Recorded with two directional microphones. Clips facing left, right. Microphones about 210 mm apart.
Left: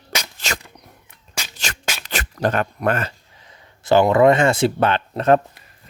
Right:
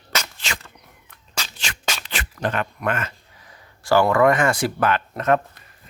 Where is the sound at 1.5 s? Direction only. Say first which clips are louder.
Left 3 dB; 40° left (ahead or behind).